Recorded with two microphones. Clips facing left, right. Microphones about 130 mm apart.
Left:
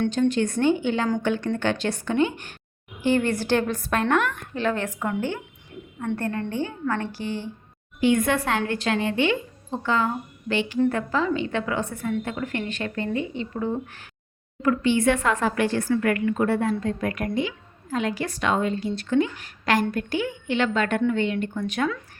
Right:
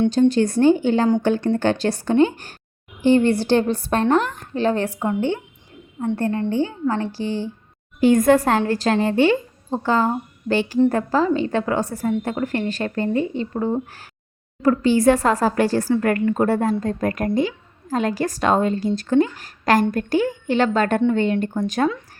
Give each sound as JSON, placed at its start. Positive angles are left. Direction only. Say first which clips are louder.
{"t": 0.1, "sound": "a woman's voice", "louder": "right 5 dB", "side_deg": -35}